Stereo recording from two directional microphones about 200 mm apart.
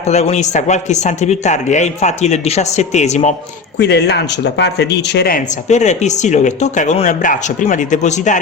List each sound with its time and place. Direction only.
0.0 s speech: 35° left (ahead or behind)
3.8 s speech: 55° left (ahead or behind)
5.6 s speech: 35° left (ahead or behind)